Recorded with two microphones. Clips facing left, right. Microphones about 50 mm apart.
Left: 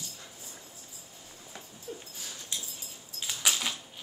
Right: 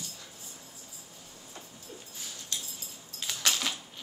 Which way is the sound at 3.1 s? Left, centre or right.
Centre.